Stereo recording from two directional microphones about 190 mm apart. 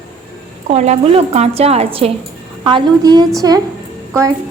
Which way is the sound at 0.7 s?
35° right (ahead or behind).